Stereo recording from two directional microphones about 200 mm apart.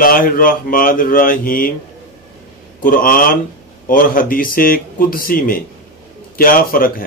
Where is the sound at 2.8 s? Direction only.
45° left (ahead or behind).